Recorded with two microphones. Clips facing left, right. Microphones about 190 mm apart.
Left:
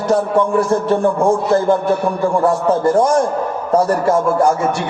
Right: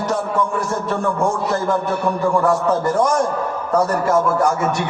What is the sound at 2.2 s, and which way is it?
A man's voice, 30° left (ahead or behind).